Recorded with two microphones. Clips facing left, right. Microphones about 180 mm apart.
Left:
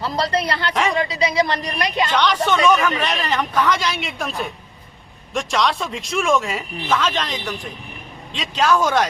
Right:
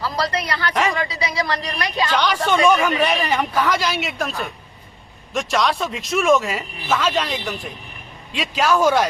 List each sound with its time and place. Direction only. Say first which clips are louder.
0.0 s a woman's voice: left 2 dB; 25° left (ahead or behind)
0.7 s speech: right 1 dB; centre (ahead or behind)
0.9 s a woman's voice: left 5 dB; 20° left (ahead or behind)
2.1 s speech: right 1 dB; 10° right (ahead or behind)